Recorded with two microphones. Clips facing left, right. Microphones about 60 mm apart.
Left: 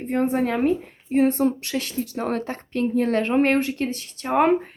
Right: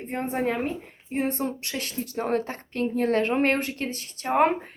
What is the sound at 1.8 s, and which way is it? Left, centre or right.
Speech, right.